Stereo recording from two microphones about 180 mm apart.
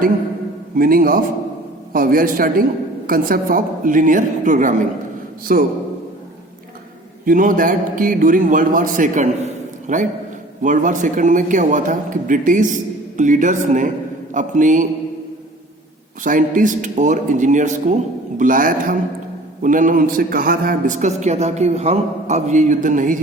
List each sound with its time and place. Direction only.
0.8 s a man's voice: 50° right (ahead or behind)
7.3 s a man's voice: 50° right (ahead or behind)
16.2 s a man's voice: 45° right (ahead or behind)